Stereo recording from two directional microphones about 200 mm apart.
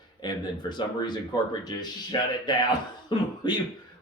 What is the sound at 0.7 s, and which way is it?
Speech, 20° left (ahead or behind).